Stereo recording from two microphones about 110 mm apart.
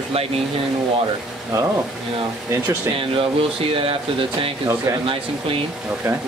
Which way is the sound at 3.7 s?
55° right (ahead or behind).